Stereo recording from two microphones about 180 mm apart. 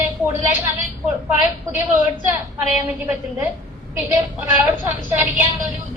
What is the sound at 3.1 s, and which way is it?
A woman's voice, 10° right (ahead or behind).